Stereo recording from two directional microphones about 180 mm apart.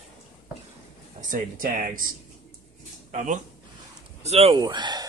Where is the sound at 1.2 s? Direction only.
45° right (ahead or behind).